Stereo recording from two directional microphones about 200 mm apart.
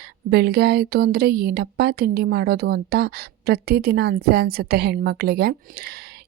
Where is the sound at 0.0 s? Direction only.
55° right (ahead or behind).